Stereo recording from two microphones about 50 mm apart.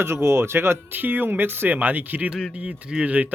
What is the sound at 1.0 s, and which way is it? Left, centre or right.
Speech, right.